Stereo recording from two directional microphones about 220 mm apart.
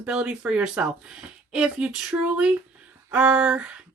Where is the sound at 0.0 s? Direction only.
5° right (ahead or behind).